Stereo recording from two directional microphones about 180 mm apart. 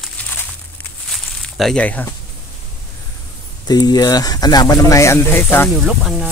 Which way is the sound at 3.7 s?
20° left (ahead or behind).